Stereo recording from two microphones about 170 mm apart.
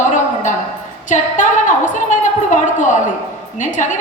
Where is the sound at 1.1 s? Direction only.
45° left (ahead or behind).